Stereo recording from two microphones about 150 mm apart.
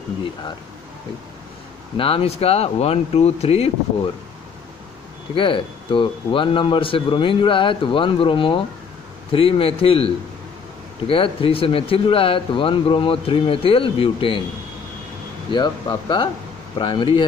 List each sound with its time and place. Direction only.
2.0 s a man's voice: 35° left (ahead or behind)
5.3 s a man's voice: 35° left (ahead or behind)
15.5 s a man's voice: 30° left (ahead or behind)